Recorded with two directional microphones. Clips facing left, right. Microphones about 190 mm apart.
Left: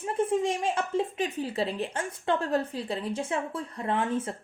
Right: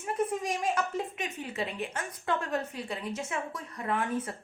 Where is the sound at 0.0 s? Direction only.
30° left (ahead or behind).